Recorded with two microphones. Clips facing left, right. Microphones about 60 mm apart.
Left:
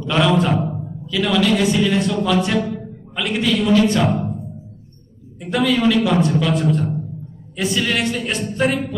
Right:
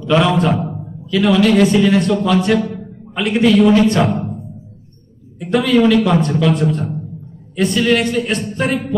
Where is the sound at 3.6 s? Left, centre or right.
Right.